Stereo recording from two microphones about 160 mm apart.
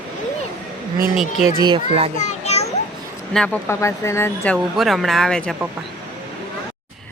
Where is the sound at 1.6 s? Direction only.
35° right (ahead or behind).